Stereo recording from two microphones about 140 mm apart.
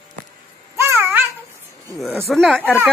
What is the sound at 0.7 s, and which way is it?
Cat, 15° right (ahead or behind).